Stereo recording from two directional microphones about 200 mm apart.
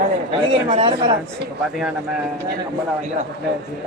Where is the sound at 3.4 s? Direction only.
55° right (ahead or behind).